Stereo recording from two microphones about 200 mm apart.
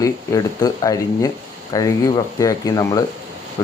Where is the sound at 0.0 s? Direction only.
15° left (ahead or behind).